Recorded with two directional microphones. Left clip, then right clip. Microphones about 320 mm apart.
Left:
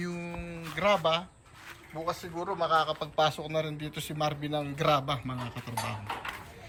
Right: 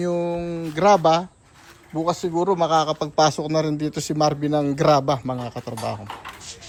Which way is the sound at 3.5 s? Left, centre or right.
Centre.